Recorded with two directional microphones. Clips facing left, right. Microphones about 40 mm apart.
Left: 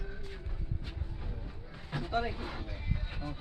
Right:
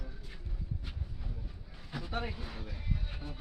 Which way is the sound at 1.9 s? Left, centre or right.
Left.